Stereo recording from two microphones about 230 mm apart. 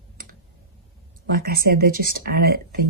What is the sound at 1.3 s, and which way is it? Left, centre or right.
Speech, right.